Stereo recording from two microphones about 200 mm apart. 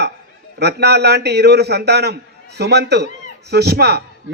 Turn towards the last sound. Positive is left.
turn(degrees=-55)  # may be behind; listen again after turning